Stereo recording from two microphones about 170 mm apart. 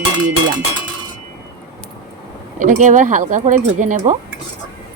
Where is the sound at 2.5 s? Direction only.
45° right (ahead or behind).